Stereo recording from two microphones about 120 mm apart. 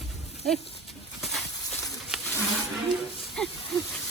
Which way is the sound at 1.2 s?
Centre (ahead or behind).